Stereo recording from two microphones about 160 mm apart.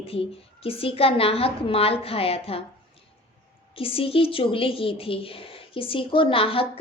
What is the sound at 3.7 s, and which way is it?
A woman's voice, 35° left (ahead or behind).